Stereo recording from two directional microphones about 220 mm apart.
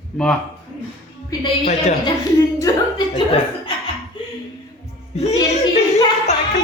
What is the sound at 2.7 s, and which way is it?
Speech, 15° left (ahead or behind).